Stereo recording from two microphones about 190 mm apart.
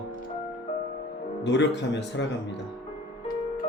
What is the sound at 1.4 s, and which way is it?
Speech, 65° left (ahead or behind).